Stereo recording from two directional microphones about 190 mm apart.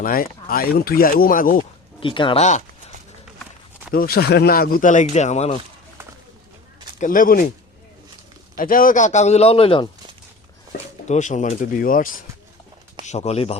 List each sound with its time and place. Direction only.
0.0 s speech: 50° left (ahead or behind)
2.0 s speech: 25° left (ahead or behind)
3.9 s speech: 50° left (ahead or behind); by 5.5 s 35° left (ahead or behind)
7.0 s speech: 45° left (ahead or behind)
8.5 s a man's voice: 45° left (ahead or behind); by 9.9 s 30° left (ahead or behind)
10.7 s speech: 40° left (ahead or behind)
13.1 s a man's voice: 35° left (ahead or behind)